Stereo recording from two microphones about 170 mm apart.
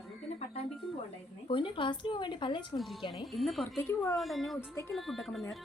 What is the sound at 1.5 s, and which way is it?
Speech, 30° left (ahead or behind).